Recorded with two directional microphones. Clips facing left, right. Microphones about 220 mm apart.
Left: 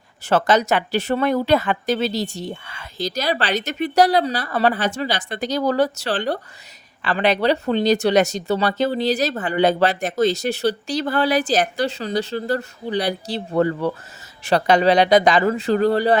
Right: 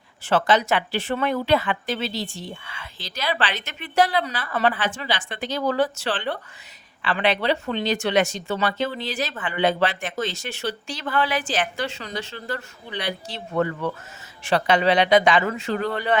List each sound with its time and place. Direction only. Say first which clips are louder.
0.3 s speech: left 3 dB; 45° left (ahead or behind)